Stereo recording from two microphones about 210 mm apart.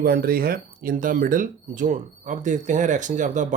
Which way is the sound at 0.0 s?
45° right (ahead or behind).